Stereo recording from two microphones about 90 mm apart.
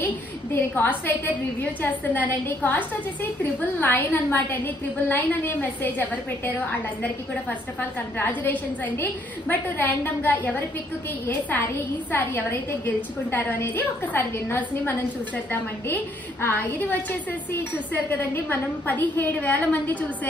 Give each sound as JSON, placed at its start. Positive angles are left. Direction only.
{"t": 0.0, "sound": "a woman's voice", "side_deg": 25}
{"t": 3.8, "sound": "a woman's voice", "side_deg": 20}
{"t": 17.9, "sound": "a woman's voice", "side_deg": 20}